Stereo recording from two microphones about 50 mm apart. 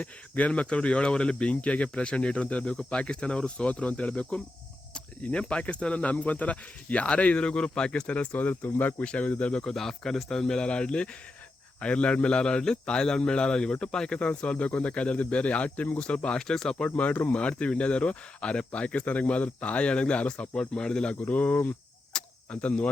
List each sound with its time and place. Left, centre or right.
0.0 s speech: left
9.0 s speech: left
9.6 s speech: centre
17.0 s speech: left
17.3 s speech: left